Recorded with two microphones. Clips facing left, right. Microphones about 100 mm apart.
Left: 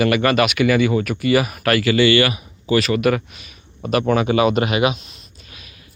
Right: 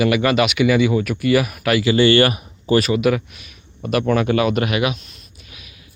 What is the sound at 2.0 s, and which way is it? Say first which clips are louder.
Speech: right 3 dB; 45° right (ahead or behind).